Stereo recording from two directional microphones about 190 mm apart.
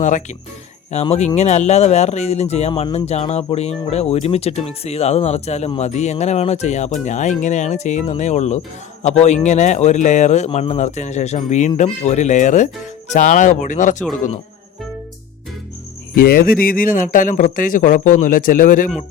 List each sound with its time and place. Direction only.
0.9 s speech: 35° left (ahead or behind)
16.2 s speech: 50° left (ahead or behind)